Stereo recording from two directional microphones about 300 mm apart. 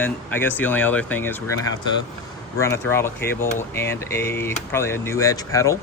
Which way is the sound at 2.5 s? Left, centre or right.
Centre.